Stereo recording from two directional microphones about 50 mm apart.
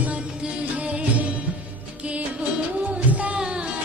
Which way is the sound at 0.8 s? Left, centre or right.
Right.